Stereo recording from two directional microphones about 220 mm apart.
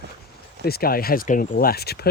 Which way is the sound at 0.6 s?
45° left (ahead or behind).